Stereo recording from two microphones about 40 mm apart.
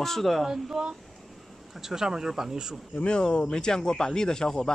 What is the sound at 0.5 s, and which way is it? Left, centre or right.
Speech, centre.